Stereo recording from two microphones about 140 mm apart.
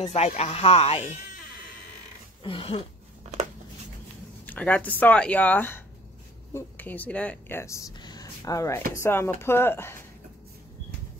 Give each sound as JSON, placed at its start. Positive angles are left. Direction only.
{"t": 0.0, "sound": "speech", "side_deg": 50}
{"t": 2.4, "sound": "a sound", "side_deg": 40}
{"t": 4.5, "sound": "speech", "side_deg": 10}